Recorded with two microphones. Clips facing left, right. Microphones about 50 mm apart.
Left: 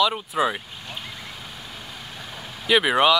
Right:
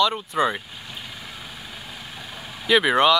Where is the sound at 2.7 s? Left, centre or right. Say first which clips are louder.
Right 1 dB; centre.